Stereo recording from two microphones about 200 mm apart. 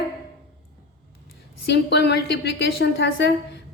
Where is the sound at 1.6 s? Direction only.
55° left (ahead or behind).